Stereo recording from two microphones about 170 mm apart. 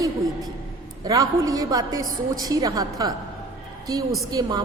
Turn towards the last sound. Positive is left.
turn(degrees=-20)  # may be behind; listen again after turning